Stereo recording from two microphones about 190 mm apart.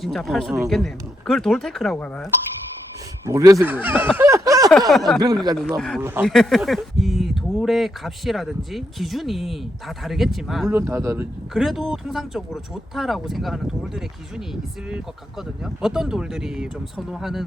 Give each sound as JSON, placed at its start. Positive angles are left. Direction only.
{"t": 0.0, "sound": "speech", "side_deg": 0}
{"t": 3.2, "sound": "speech", "side_deg": -15}
{"t": 4.2, "sound": "a sound", "side_deg": -15}
{"t": 4.9, "sound": "speech", "side_deg": 0}
{"t": 5.2, "sound": "speech", "side_deg": -20}
{"t": 5.5, "sound": "speech", "side_deg": 0}
{"t": 6.0, "sound": "speech", "side_deg": -10}
{"t": 6.2, "sound": "speech", "side_deg": 0}
{"t": 10.7, "sound": "speech", "side_deg": -10}
{"t": 11.5, "sound": "speech", "side_deg": 0}